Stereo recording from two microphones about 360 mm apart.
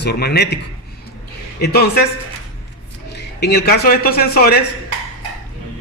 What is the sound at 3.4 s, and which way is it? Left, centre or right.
A man's voice, left.